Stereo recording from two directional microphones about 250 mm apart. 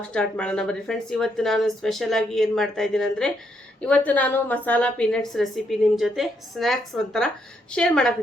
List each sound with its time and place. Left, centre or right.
0.1 s a woman's voice: centre